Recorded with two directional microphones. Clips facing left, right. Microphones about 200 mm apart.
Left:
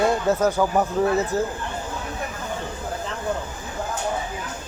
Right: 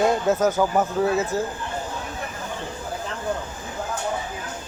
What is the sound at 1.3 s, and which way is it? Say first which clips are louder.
Speech: left 2 dB; 15° left (ahead or behind).